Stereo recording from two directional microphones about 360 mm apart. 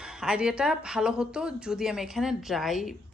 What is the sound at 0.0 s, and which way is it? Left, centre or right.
Speech, centre.